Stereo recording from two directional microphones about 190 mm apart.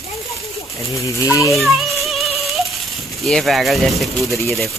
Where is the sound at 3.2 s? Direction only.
Centre (ahead or behind).